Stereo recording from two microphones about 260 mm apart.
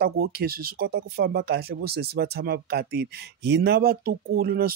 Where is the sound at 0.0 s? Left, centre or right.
Right.